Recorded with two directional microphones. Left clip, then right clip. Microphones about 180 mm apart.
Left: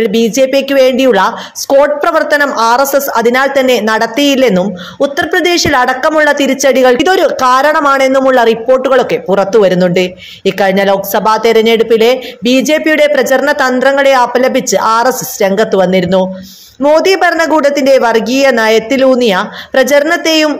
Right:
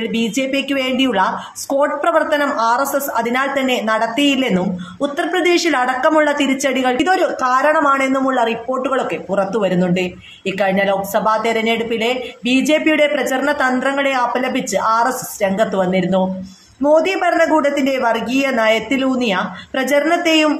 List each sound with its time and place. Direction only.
0.1 s speech: 35° left (ahead or behind)